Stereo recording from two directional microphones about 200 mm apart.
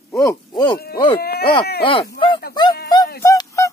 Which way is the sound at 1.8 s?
25° left (ahead or behind).